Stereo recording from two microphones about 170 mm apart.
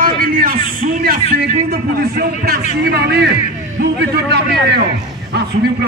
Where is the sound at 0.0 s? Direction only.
55° right (ahead or behind).